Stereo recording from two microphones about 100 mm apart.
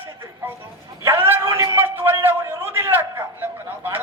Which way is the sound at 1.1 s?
20° right (ahead or behind).